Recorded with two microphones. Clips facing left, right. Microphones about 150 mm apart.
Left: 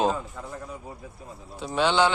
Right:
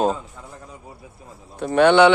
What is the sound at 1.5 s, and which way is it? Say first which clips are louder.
Speech: right 9 dB; 60° right (ahead or behind).